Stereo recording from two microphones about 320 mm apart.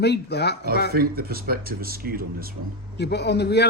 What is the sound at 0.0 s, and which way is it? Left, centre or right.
Speech, left.